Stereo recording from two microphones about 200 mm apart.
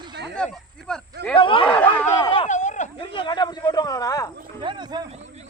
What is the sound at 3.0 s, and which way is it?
Speech, 25° left (ahead or behind).